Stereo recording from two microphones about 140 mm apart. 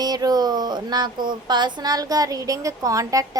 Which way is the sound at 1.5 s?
30° right (ahead or behind).